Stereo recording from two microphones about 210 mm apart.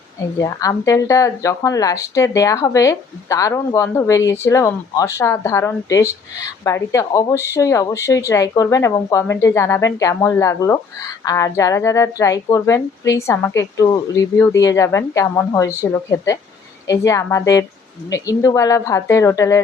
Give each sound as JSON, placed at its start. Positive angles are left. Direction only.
{"t": 0.3, "sound": "a woman's voice", "side_deg": 15}